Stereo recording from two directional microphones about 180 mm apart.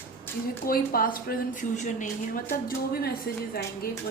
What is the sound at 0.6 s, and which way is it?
Speech, 55° left (ahead or behind).